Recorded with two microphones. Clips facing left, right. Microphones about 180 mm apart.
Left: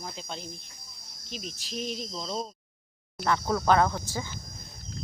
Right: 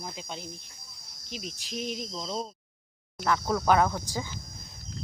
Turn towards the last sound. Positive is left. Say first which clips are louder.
# even
turn(degrees=-15)  # may be behind; listen again after turning